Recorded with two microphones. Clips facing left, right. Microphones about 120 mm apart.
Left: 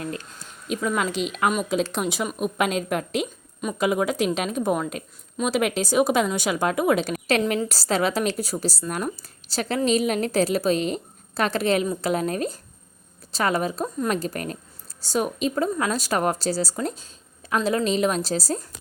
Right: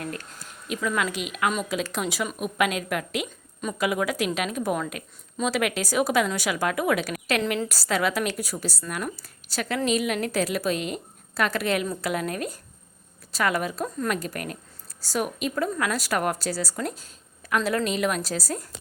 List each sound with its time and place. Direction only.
0.0 s a woman's voice: 25° left (ahead or behind)